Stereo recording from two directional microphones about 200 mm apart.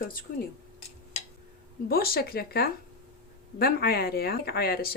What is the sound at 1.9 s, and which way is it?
Speech, 50° left (ahead or behind).